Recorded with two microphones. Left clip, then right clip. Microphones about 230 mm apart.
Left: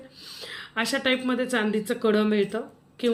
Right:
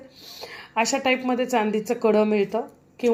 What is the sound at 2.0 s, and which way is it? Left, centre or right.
Speech, right.